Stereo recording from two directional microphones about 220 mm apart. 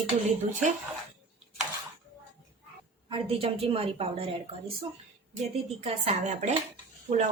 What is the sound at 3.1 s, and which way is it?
A woman's voice, 25° right (ahead or behind).